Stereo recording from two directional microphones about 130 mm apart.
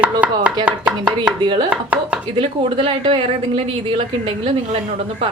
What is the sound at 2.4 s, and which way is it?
A woman's voice, 40° right (ahead or behind).